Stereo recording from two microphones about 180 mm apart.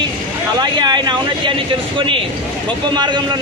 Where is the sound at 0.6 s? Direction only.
25° right (ahead or behind).